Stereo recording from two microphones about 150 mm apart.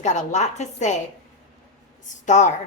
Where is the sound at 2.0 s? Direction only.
55° left (ahead or behind).